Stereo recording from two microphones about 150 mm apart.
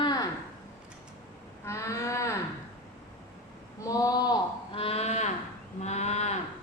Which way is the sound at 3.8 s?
25° left (ahead or behind).